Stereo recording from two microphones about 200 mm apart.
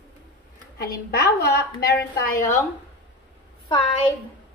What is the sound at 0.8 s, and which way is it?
A woman's voice, 55° left (ahead or behind).